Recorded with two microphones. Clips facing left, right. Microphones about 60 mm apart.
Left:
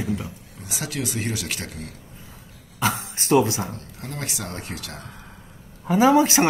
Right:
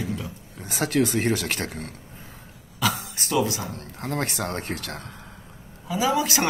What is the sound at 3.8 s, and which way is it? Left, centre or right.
Speech, right.